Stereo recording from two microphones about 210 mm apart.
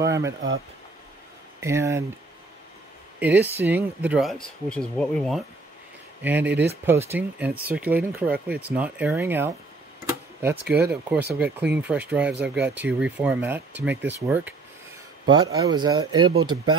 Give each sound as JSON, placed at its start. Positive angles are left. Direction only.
{"t": 0.0, "sound": "speech", "side_deg": -15}
{"t": 1.6, "sound": "speech", "side_deg": -15}
{"t": 3.2, "sound": "speech", "side_deg": -10}
{"t": 6.2, "sound": "speech", "side_deg": -10}
{"t": 8.3, "sound": "speech", "side_deg": -45}
{"t": 8.7, "sound": "speech", "side_deg": -5}
{"t": 15.2, "sound": "speech", "side_deg": -20}